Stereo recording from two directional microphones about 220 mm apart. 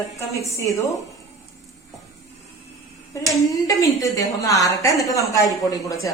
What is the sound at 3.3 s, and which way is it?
Speech, 15° left (ahead or behind).